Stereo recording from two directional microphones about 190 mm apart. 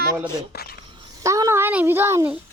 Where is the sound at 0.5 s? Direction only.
55° left (ahead or behind).